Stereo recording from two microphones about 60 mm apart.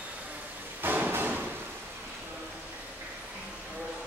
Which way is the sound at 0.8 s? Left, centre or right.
Right.